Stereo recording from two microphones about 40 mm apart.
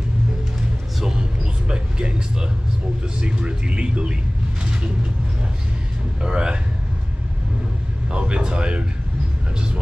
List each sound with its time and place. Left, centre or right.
1.7 s vehicle: right
3.2 s speech: right
6.2 s speech: right
8.1 s speech: right